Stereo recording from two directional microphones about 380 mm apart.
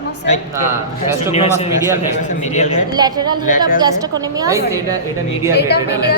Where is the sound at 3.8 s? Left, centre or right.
Centre.